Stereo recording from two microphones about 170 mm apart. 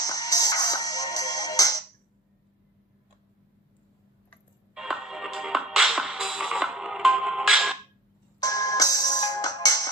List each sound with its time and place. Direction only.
0.0 s music: 20° left (ahead or behind)
4.7 s music: 5° right (ahead or behind)
8.4 s music: 20° left (ahead or behind)